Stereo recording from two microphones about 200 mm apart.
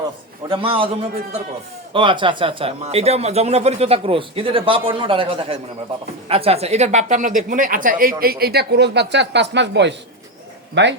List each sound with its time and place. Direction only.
0.4 s speech: 25° right (ahead or behind)
1.9 s a woman's voice: 25° right (ahead or behind); by 10.9 s 60° right (ahead or behind)